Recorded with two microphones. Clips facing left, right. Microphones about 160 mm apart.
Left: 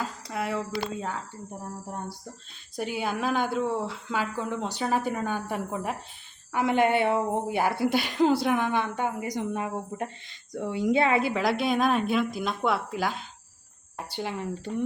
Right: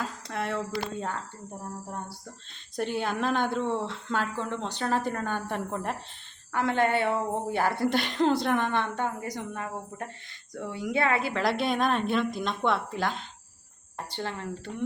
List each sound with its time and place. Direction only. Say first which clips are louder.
0.0 s speech: left 1 dB; 5° left (ahead or behind)
2.7 s a woman's voice: right 1 dB; 5° left (ahead or behind)
11.4 s a woman's voice: right 1 dB; centre (ahead or behind)